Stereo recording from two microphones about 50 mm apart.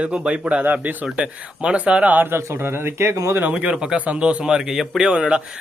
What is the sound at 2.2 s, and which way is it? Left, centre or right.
Speech, right.